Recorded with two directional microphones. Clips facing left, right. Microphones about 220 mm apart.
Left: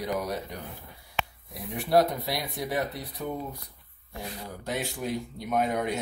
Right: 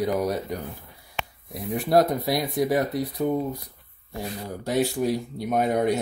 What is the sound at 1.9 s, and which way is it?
Speech, 45° right (ahead or behind).